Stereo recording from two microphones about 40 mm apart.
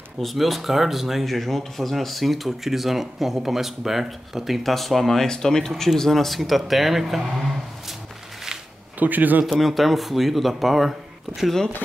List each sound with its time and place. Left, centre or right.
0.2 s speech: centre
9.0 s speech: right
9.5 s speech: centre